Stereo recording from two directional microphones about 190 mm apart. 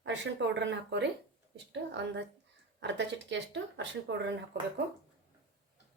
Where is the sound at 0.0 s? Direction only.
70° right (ahead or behind).